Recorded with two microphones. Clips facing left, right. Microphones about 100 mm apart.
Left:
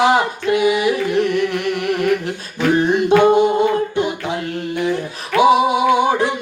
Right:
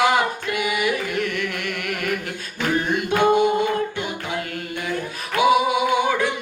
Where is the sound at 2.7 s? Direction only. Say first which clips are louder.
Left 8 dB; 25° left (ahead or behind).